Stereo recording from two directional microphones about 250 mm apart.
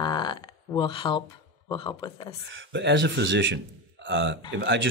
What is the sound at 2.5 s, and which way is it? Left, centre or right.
Speech, right.